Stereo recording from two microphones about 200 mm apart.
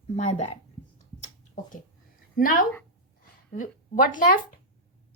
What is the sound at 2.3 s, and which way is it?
A woman's voice, 45° left (ahead or behind).